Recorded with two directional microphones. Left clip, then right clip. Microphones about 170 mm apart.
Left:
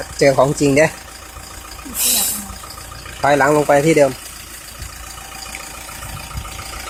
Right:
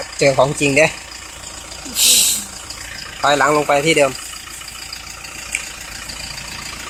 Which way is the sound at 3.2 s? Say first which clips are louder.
Left 1 dB; 25° left (ahead or behind).